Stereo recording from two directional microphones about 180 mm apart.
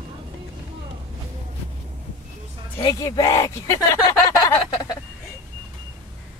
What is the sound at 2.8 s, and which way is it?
Speech, 20° left (ahead or behind).